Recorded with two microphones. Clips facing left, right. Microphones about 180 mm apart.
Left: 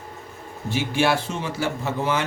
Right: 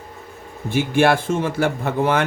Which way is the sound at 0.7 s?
55° right (ahead or behind).